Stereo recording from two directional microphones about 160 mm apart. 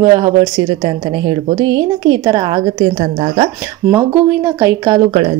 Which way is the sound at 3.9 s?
15° right (ahead or behind).